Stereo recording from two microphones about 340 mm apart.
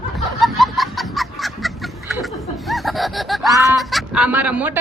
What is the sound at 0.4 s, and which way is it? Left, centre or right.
Chicken, centre.